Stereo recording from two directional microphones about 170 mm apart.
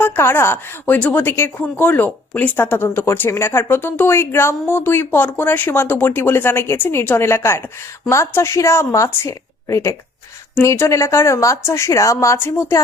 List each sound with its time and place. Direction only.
0.0 s a woman's voice: 15° left (ahead or behind)